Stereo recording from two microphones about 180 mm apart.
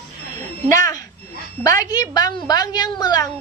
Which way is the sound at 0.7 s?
20° left (ahead or behind).